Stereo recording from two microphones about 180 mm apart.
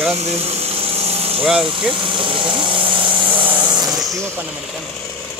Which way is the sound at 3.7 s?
20° right (ahead or behind).